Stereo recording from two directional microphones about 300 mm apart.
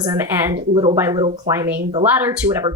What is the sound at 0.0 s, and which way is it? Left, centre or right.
A woman's voice, centre.